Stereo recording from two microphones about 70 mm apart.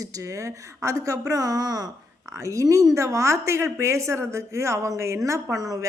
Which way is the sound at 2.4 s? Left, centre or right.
Right.